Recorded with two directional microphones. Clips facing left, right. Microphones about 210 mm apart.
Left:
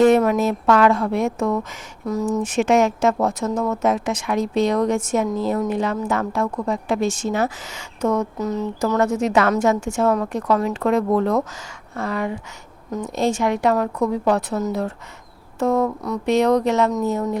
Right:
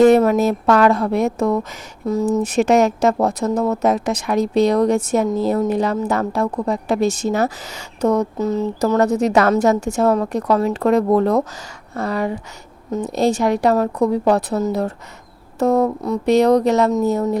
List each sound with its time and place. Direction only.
0.0 s speech: 35° right (ahead or behind)
2.4 s speech: 40° right (ahead or behind)